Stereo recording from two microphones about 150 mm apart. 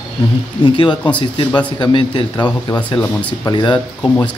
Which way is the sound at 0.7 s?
30° left (ahead or behind).